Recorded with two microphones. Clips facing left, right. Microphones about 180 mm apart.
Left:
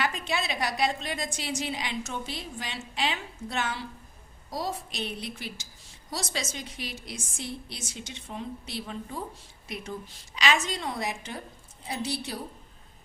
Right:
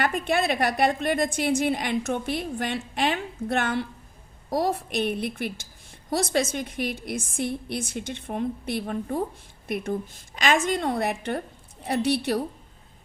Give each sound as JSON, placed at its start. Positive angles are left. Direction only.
{"t": 0.0, "sound": "a woman's voice", "side_deg": -55}